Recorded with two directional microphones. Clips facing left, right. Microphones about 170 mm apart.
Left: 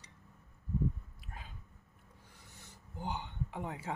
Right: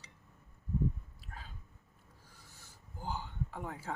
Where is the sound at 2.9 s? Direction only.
20° left (ahead or behind).